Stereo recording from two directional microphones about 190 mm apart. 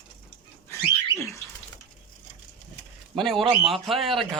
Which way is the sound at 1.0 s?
15° left (ahead or behind).